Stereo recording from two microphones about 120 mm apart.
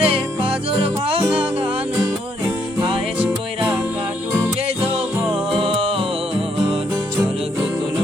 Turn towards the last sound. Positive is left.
turn(degrees=-50)  # may be behind; listen again after turning